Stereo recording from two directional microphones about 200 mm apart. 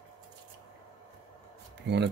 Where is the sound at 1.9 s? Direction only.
55° right (ahead or behind).